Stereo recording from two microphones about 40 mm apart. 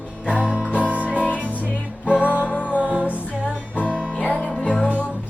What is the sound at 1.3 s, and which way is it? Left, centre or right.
Music, right.